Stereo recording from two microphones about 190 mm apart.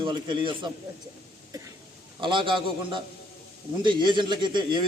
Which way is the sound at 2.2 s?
25° right (ahead or behind).